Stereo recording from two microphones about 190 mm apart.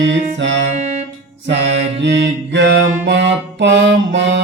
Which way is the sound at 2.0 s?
65° right (ahead or behind).